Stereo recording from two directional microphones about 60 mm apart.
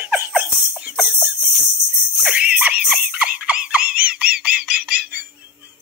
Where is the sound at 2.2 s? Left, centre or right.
Right.